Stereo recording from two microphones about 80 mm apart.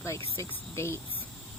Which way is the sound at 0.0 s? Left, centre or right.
Left.